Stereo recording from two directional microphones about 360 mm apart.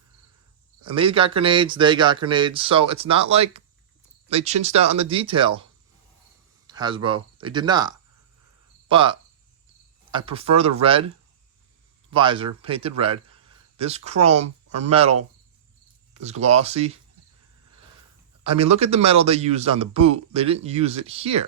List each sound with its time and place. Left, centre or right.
0.8 s speech: centre
6.7 s speech: centre
8.9 s cricket: centre
10.1 s speech: centre
12.1 s speech: centre
16.2 s speech: centre
18.4 s speech: centre